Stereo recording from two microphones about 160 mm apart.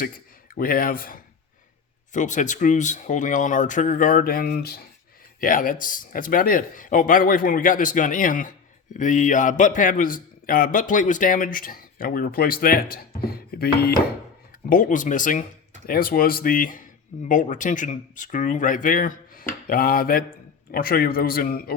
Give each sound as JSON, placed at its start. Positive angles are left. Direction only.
{"t": 0.5, "sound": "speech", "side_deg": 65}
{"t": 2.1, "sound": "speech", "side_deg": 50}
{"t": 5.4, "sound": "speech", "side_deg": 60}
{"t": 14.7, "sound": "speech", "side_deg": 55}
{"t": 15.9, "sound": "speech", "side_deg": 65}